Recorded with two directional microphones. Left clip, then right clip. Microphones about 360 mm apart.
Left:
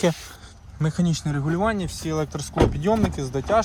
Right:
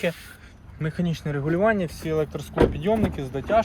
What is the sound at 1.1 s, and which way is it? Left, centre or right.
Speech, centre.